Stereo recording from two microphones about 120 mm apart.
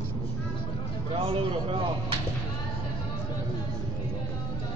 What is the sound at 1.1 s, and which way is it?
Speech, 50° right (ahead or behind).